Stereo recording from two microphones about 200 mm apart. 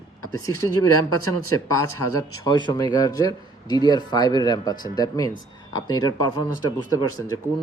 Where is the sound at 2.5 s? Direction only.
20° left (ahead or behind).